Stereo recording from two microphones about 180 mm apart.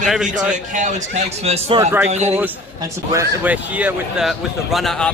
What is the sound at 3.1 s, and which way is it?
A man's voice, 10° right (ahead or behind).